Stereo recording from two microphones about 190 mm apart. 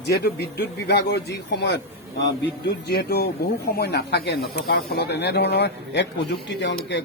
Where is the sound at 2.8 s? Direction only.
60° left (ahead or behind).